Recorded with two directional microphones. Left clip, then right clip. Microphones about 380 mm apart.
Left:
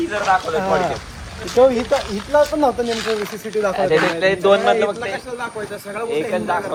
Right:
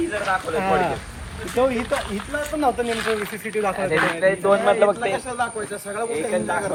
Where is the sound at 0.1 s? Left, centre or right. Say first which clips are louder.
Left 5 dB; centre.